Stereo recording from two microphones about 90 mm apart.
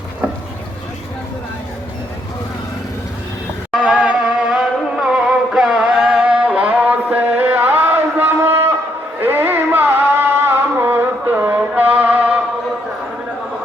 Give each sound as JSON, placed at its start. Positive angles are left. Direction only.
{"t": 3.8, "sound": "music", "side_deg": -15}